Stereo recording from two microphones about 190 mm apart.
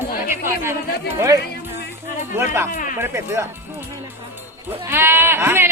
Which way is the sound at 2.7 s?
45° left (ahead or behind).